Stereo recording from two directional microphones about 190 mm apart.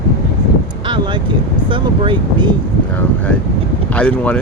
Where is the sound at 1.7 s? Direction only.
25° right (ahead or behind).